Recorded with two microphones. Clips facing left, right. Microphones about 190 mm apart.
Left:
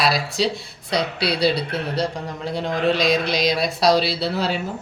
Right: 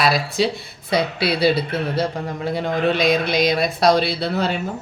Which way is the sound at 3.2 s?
55° right (ahead or behind).